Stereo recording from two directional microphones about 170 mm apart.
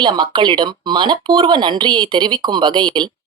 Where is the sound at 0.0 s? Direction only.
25° right (ahead or behind).